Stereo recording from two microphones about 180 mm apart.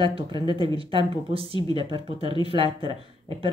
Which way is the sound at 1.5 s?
90° left.